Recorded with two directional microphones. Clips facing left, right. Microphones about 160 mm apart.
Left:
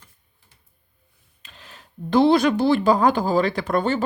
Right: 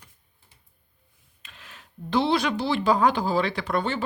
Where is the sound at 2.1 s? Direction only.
45° left (ahead or behind).